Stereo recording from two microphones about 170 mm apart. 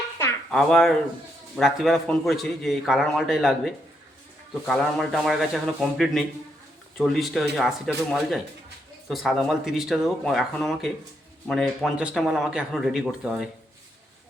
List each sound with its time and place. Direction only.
0.5 s a man's voice: centre (ahead or behind)